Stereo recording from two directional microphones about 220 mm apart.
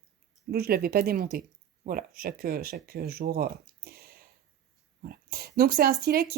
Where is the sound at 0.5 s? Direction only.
45° right (ahead or behind).